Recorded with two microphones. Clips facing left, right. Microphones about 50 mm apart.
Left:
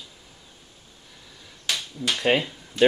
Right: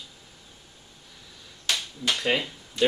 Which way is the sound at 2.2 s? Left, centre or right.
Left.